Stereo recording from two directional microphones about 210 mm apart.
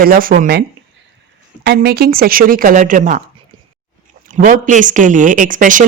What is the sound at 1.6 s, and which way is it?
Speech, 50° right (ahead or behind).